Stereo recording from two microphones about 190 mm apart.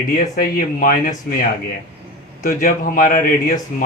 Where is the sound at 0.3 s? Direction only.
45° left (ahead or behind).